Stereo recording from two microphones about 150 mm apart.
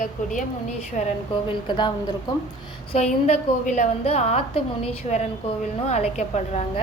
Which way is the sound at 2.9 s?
50° left (ahead or behind).